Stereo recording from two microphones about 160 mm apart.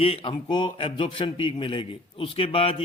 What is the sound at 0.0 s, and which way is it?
A man's voice, 35° left (ahead or behind).